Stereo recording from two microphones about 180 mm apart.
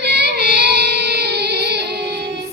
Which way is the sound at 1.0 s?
70° right (ahead or behind).